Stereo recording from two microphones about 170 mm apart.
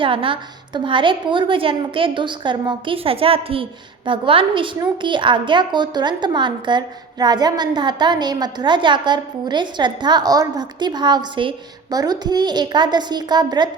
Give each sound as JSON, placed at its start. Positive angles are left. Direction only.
{"t": 0.0, "sound": "a woman's voice", "side_deg": -30}